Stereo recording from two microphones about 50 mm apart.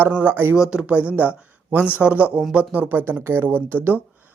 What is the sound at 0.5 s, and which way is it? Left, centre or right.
Speech, centre.